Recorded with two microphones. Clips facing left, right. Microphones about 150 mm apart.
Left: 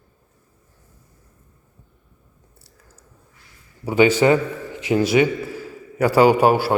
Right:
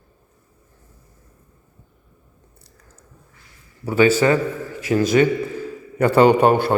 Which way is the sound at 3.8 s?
15° left (ahead or behind).